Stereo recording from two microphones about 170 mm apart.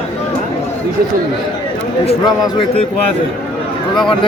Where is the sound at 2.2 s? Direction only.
25° left (ahead or behind).